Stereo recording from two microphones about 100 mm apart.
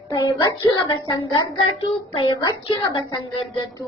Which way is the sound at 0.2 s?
35° left (ahead or behind).